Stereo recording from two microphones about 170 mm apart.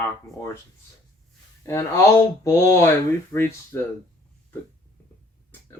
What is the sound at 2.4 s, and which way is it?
Speech, 15° left (ahead or behind).